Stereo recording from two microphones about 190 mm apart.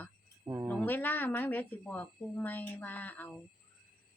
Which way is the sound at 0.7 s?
10° left (ahead or behind).